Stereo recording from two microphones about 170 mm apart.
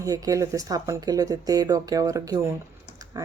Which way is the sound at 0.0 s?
20° right (ahead or behind).